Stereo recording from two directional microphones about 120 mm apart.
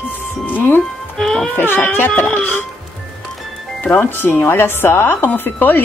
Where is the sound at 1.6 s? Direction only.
15° left (ahead or behind).